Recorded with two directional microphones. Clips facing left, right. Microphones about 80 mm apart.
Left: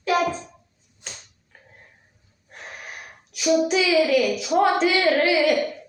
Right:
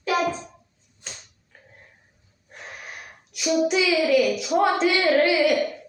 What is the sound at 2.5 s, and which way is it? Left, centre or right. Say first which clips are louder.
Speech: left 1 dB; centre.